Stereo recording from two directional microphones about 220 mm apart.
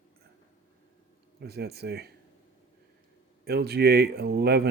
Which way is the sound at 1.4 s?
45° right (ahead or behind).